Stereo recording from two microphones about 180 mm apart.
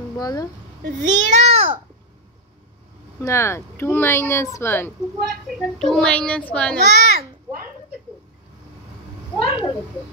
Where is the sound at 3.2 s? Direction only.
15° left (ahead or behind).